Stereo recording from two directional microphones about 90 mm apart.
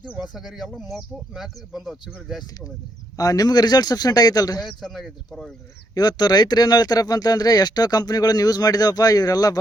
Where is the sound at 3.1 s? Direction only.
45° left (ahead or behind).